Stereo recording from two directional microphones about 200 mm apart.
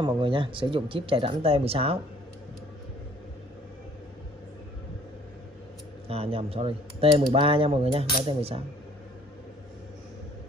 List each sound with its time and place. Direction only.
0.0 s speech: 25° right (ahead or behind)
6.0 s speech: 30° right (ahead or behind)